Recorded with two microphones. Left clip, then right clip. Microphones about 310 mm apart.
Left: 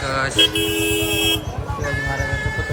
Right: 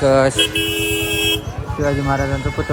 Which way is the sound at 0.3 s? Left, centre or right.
Left.